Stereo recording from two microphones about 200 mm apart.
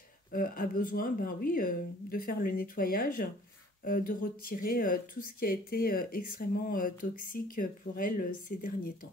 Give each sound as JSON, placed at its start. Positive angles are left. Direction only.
{"t": 0.3, "sound": "speech", "side_deg": 45}